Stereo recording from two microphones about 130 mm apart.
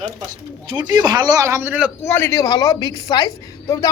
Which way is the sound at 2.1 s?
20° left (ahead or behind).